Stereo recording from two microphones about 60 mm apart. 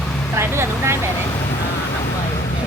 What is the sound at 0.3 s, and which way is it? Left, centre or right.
Vehicle, right.